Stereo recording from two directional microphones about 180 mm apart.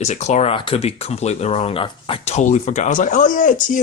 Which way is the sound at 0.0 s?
40° left (ahead or behind).